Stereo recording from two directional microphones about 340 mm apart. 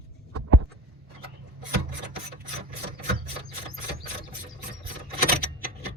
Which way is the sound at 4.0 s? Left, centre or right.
Right.